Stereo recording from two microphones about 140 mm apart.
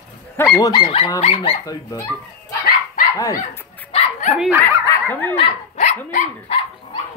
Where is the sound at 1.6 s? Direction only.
25° left (ahead or behind).